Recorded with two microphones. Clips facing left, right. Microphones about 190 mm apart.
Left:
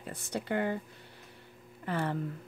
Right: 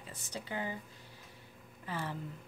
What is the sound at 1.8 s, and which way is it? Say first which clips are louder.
Speech: left 7 dB; 60° left (ahead or behind).